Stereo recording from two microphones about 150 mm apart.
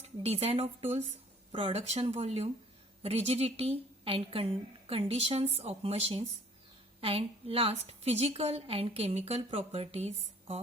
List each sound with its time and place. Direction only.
0.0 s a woman's voice: 45° right (ahead or behind)